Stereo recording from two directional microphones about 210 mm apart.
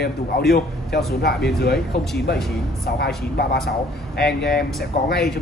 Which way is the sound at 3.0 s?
50° left (ahead or behind).